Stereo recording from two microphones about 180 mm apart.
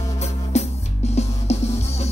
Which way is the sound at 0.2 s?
35° left (ahead or behind).